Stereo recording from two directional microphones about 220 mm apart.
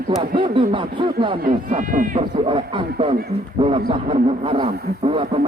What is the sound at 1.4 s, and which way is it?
Speech, 35° right (ahead or behind).